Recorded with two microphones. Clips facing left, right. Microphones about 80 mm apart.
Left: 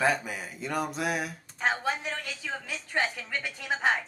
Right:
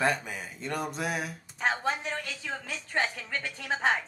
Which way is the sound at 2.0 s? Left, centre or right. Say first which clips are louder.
Even; centre.